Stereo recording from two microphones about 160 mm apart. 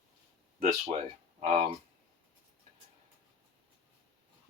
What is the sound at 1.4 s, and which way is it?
Speech, 45° right (ahead or behind).